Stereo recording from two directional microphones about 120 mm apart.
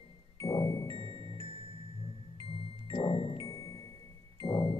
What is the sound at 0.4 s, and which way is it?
Music, 25° left (ahead or behind).